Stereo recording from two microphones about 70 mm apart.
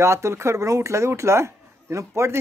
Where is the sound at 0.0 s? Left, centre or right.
Right.